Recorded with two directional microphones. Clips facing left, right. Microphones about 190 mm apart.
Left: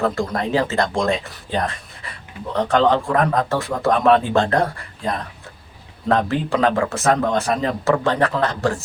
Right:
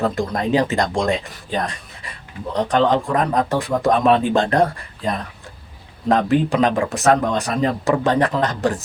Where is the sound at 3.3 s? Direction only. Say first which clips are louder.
Right 2 dB; 15° right (ahead or behind).